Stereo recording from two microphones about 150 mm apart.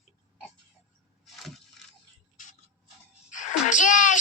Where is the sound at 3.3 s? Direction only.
55° left (ahead or behind).